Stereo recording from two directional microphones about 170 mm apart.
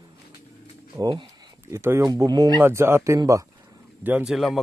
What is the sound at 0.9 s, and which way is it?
Speech, 25° right (ahead or behind).